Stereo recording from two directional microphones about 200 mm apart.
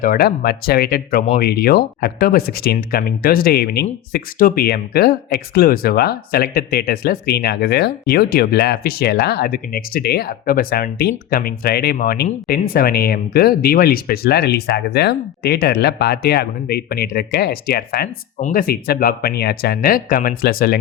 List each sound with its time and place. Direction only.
0.0 s speech: 50° left (ahead or behind)